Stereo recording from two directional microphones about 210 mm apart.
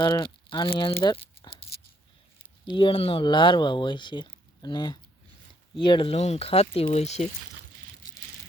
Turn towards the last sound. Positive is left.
turn(degrees=30)  # may be behind; listen again after turning